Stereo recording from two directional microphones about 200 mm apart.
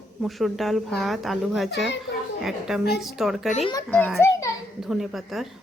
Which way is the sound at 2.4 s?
Centre (ahead or behind).